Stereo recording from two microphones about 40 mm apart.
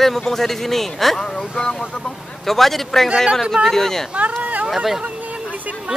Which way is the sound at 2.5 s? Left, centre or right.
Centre.